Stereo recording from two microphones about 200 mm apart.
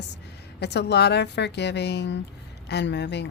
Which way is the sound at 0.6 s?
55° left (ahead or behind).